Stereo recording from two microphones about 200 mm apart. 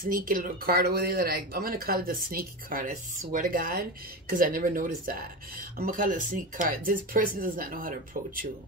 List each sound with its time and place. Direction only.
0.0 s speech: 45° right (ahead or behind)